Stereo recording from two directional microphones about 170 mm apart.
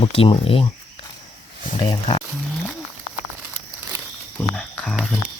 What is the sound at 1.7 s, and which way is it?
Speech, 30° left (ahead or behind).